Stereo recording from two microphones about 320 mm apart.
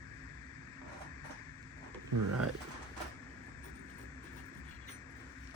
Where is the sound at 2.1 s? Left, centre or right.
Right.